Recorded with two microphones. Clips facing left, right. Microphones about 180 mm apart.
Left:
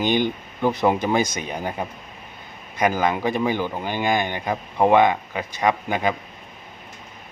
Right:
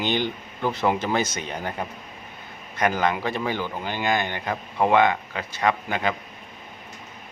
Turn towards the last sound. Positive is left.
turn(degrees=15)  # may be behind; listen again after turning